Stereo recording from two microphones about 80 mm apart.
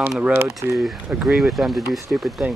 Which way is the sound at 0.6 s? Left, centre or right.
Right.